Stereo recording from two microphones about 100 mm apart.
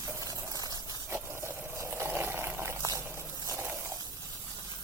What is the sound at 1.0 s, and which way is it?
Water, 25° right (ahead or behind).